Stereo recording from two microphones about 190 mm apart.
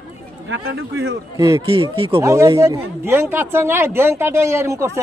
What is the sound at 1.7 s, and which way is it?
Speech, 30° right (ahead or behind).